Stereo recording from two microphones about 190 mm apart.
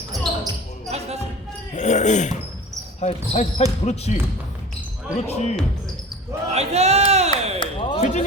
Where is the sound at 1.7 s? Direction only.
40° left (ahead or behind).